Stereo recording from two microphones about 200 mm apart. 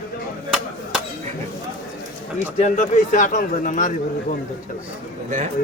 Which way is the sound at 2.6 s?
40° left (ahead or behind).